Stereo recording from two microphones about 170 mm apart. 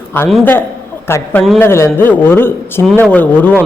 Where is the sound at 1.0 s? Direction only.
15° left (ahead or behind).